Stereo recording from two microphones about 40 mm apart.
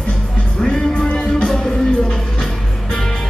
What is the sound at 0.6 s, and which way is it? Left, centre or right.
Music, centre.